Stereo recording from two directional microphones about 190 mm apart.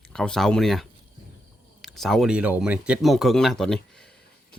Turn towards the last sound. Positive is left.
turn(degrees=5)  # may be behind; listen again after turning